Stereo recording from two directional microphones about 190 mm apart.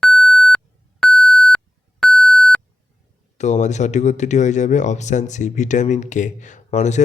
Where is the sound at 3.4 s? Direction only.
40° left (ahead or behind).